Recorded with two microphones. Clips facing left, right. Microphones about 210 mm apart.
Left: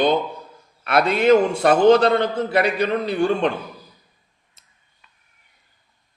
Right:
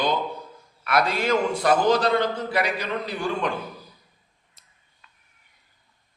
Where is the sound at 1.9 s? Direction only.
60° left (ahead or behind).